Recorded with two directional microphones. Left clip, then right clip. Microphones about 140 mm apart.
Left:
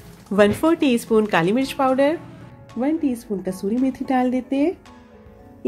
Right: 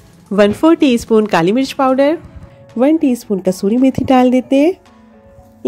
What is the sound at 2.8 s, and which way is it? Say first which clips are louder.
A woman's voice: right 10 dB; 55° right (ahead or behind).